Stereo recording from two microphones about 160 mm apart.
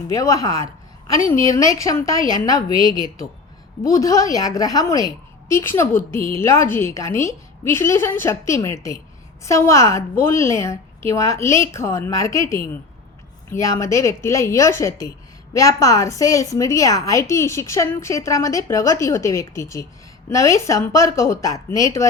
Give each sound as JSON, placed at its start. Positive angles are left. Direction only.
{"t": 0.1, "sound": "a woman's voice", "side_deg": 20}
{"t": 3.9, "sound": "a woman's voice", "side_deg": 20}